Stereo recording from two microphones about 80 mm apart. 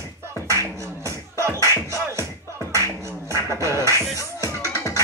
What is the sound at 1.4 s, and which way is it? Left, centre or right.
Music, right.